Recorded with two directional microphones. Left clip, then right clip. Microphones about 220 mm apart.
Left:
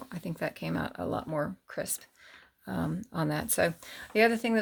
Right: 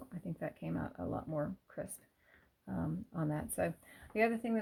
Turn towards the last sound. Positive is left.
turn(degrees=50)  # may be behind; listen again after turning